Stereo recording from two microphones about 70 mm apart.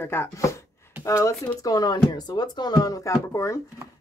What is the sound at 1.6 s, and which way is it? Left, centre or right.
Speech, left.